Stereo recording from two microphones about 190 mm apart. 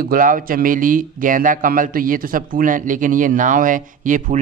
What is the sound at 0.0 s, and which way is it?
Speech, 45° right (ahead or behind).